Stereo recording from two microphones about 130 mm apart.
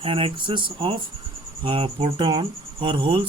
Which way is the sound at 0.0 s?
45° right (ahead or behind).